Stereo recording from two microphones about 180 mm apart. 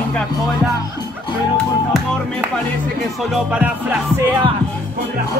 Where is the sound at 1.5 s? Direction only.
Centre (ahead or behind).